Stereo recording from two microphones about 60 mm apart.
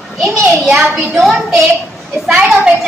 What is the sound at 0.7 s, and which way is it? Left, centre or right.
Speech, centre.